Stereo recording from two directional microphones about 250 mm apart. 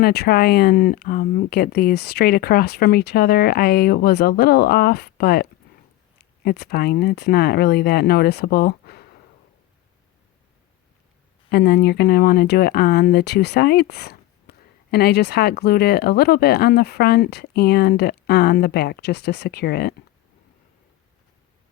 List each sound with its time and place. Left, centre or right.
0.0 s speech: left
11.4 s speech: left
14.5 s a sound: left
14.8 s speech: left